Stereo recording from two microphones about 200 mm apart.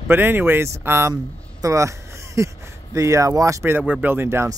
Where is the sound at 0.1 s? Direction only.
10° right (ahead or behind).